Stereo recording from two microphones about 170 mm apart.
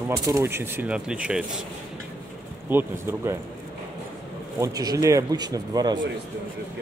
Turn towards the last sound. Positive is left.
turn(degrees=-25)  # may be behind; listen again after turning